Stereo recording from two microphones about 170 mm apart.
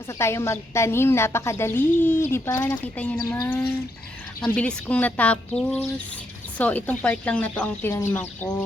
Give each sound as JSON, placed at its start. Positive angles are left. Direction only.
{"t": 0.2, "sound": "a woman's voice", "side_deg": 15}
{"t": 3.2, "sound": "a woman's voice", "side_deg": 20}